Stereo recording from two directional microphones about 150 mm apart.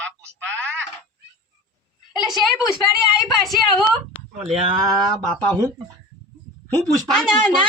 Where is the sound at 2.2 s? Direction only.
5° right (ahead or behind).